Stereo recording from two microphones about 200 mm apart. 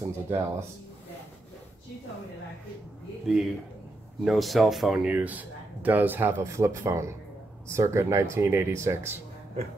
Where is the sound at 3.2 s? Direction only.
Centre (ahead or behind).